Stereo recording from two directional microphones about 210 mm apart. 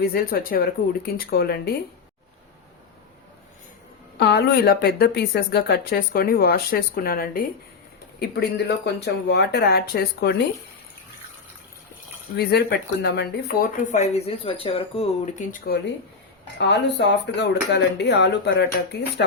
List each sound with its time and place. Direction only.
0.1 s speech: 45° left (ahead or behind)
4.2 s speech: 55° left (ahead or behind)
12.4 s speech: 50° left (ahead or behind); by 15.4 s 30° left (ahead or behind)
16.6 s speech: 55° left (ahead or behind)